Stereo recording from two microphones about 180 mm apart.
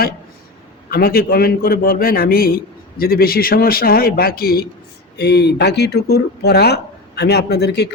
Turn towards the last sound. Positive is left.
turn(degrees=65)  # may be behind; listen again after turning